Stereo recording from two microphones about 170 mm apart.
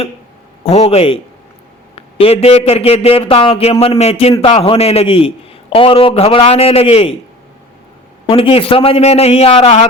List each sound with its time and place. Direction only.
0.6 s a man's voice: 35° left (ahead or behind)
8.3 s a man's voice: 35° left (ahead or behind)